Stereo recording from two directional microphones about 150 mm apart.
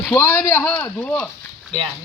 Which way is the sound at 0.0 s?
15° left (ahead or behind).